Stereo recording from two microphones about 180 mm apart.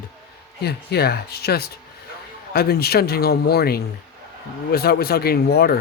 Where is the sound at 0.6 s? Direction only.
65° left (ahead or behind).